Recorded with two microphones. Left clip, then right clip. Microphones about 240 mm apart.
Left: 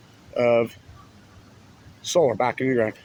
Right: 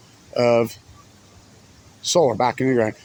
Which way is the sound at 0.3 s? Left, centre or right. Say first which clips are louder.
Right 2 dB; right.